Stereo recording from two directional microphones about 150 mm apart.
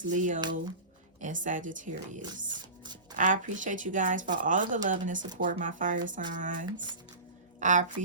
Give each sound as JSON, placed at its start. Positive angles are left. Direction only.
{"t": 0.0, "sound": "speech", "side_deg": -60}
{"t": 2.2, "sound": "music", "side_deg": -30}
{"t": 3.2, "sound": "a woman's voice", "side_deg": -55}